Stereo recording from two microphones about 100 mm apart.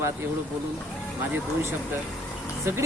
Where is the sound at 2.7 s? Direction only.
25° right (ahead or behind).